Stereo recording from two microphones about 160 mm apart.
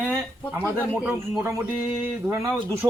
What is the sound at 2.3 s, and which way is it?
Speech, 15° right (ahead or behind).